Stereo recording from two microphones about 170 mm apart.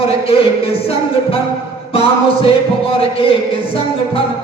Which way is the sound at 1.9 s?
35° left (ahead or behind).